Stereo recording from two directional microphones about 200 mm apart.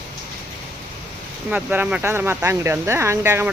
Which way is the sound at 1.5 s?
5° right (ahead or behind).